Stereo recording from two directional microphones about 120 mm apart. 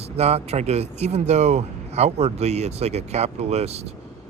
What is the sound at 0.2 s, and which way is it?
Speech, 60° right (ahead or behind).